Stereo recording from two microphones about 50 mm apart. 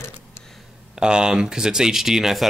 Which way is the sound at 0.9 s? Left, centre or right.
Centre.